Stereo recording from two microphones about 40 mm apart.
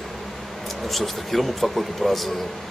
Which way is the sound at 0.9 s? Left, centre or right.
Centre.